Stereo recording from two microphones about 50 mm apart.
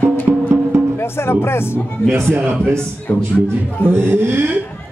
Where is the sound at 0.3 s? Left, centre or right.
Right.